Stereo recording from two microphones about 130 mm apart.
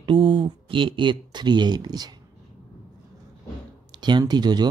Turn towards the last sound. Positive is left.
turn(degrees=-35)  # may be behind; listen again after turning